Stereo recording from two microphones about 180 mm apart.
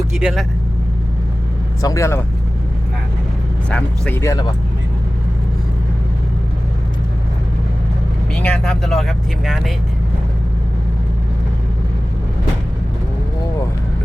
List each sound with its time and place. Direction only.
0.2 s speech: 5° right (ahead or behind)
1.8 s speech: 15° left (ahead or behind)
3.7 s speech: 5° left (ahead or behind)
8.4 s speech: 5° left (ahead or behind)